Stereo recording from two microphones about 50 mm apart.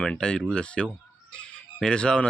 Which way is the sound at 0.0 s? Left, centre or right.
Centre.